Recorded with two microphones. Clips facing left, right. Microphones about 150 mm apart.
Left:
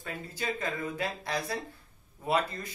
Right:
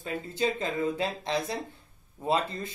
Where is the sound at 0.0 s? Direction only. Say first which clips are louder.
Right 7 dB; 20° right (ahead or behind).